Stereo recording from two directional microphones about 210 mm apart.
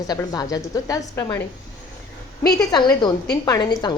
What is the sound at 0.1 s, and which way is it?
A woman's voice, 20° left (ahead or behind).